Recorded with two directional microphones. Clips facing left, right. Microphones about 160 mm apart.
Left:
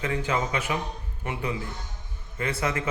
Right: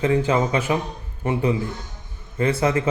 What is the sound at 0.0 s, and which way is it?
A man's voice, 30° right (ahead or behind).